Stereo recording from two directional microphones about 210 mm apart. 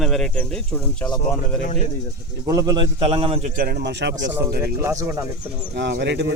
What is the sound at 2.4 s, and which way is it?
A man's voice, 15° right (ahead or behind).